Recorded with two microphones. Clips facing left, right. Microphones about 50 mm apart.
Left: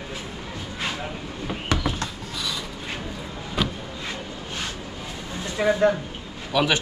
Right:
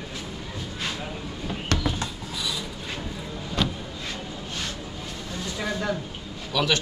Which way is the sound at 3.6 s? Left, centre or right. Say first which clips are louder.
Left 1 dB; centre.